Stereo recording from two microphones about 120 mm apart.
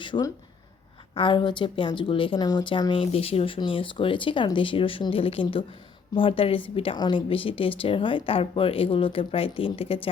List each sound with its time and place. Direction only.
0.0 s a woman's voice: 40° left (ahead or behind)